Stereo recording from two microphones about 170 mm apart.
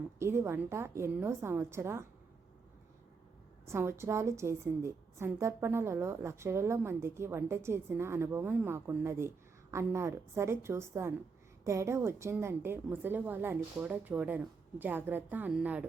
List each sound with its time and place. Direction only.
0.2 s a woman's voice: 15° right (ahead or behind)
3.7 s a woman's voice: 15° right (ahead or behind)